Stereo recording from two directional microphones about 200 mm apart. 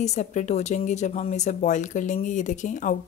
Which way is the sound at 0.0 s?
35° left (ahead or behind).